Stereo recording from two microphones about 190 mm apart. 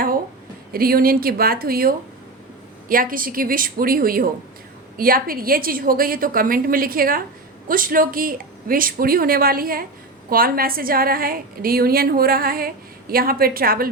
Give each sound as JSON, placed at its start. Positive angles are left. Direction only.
{"t": 0.7, "sound": "a woman's voice", "side_deg": -50}